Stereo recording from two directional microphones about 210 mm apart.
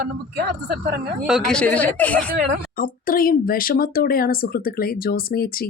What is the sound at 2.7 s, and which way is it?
Speech, 40° left (ahead or behind).